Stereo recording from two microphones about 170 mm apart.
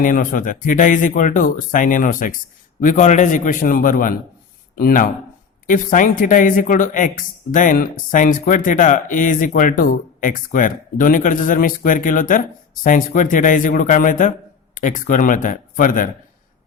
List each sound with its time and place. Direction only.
0.0 s speech: 50° left (ahead or behind)